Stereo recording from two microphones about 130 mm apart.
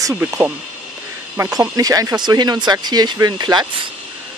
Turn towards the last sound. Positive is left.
turn(degrees=-35)  # may be behind; listen again after turning